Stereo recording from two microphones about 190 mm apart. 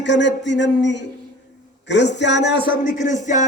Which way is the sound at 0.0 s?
70° left (ahead or behind).